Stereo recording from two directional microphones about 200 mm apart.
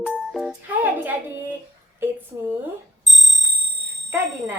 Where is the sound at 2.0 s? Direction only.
10° right (ahead or behind).